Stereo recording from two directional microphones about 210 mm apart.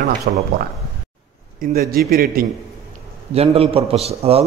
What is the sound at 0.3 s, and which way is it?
Speech, 45° right (ahead or behind).